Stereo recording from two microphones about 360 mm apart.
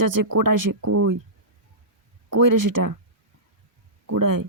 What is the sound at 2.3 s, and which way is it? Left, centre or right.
Speech, right.